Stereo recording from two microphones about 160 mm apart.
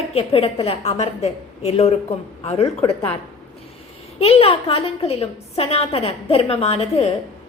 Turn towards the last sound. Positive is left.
turn(degrees=40)  # may be behind; listen again after turning